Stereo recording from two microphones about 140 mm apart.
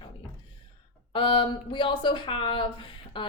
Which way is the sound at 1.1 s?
35° left (ahead or behind).